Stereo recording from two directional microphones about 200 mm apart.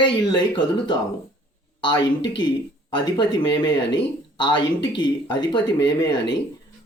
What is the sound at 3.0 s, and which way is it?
Speech, 20° left (ahead or behind).